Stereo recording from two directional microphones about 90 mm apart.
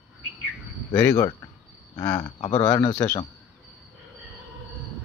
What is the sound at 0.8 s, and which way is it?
Speech, 40° left (ahead or behind).